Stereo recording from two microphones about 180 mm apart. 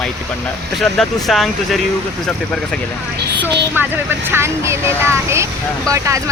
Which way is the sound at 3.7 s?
10° right (ahead or behind).